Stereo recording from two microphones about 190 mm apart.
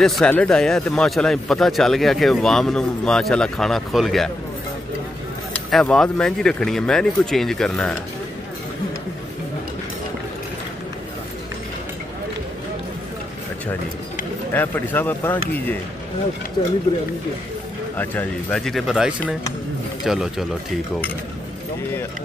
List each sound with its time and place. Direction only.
0.0 s speech: 5° left (ahead or behind)
5.7 s speech: 5° left (ahead or behind)
14.5 s speech: 10° left (ahead or behind)
16.6 s speech: 25° left (ahead or behind)
17.9 s speech: 5° left (ahead or behind)